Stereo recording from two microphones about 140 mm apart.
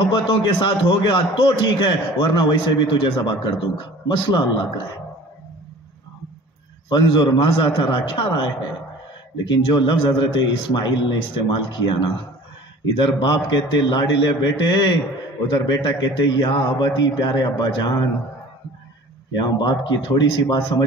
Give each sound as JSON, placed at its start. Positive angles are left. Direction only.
{"t": 0.3, "sound": "a man's voice", "side_deg": 35}
{"t": 6.9, "sound": "a man's voice", "side_deg": 30}
{"t": 19.3, "sound": "a man's voice", "side_deg": 30}